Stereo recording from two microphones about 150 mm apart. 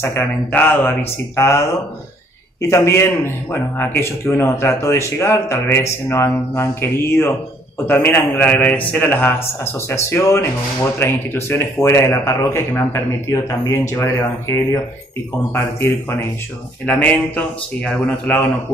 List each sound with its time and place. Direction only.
0.0 s a man's voice: 15° left (ahead or behind)
2.7 s a man's voice: 20° left (ahead or behind)